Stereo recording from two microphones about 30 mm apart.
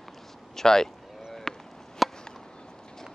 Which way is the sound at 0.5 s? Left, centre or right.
Centre.